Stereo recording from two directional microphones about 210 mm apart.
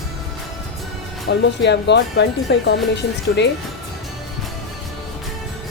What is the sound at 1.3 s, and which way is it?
Speech, 55° left (ahead or behind).